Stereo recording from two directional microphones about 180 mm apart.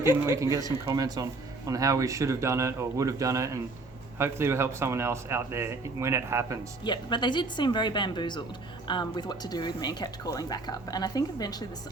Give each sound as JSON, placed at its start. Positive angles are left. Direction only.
{"t": 0.0, "sound": "speech", "side_deg": -15}
{"t": 6.8, "sound": "speech", "side_deg": 25}